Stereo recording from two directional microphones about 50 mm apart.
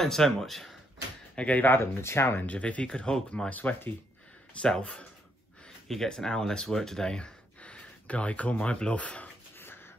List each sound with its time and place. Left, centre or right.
0.0 s speech: centre
1.3 s speech: left
1.6 s speech: left
2.4 s speech: left
2.9 s speech: centre
3.4 s speech: left
4.6 s speech: centre
5.9 s speech: centre; by 9.3 s left
9.6 s a sound: left